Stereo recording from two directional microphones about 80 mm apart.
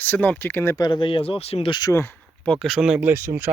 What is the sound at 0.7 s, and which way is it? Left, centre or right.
Speech, left.